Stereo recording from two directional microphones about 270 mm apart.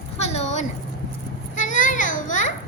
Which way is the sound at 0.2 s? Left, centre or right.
Left.